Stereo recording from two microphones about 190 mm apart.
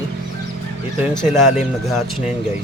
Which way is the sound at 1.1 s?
Centre (ahead or behind).